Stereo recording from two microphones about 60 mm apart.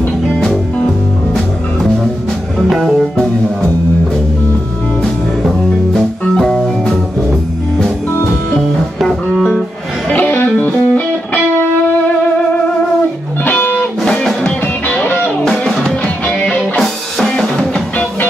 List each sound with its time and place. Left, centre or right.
2.7 s music: centre
5.9 s music: centre
8.1 s music: left
10.0 s music: left
13.4 s music: left
14.0 s music: centre
14.4 s music: left
16.3 s music: centre
17.3 s drum: centre